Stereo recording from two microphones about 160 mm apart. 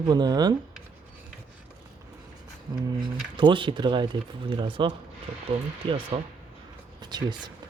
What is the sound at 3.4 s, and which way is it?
Speech, 30° right (ahead or behind).